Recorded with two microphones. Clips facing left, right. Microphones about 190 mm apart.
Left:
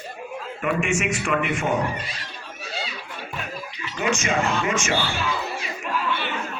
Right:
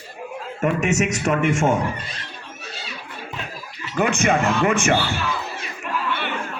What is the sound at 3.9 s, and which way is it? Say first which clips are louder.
A man's voice: right 4 dB; 55° right (ahead or behind).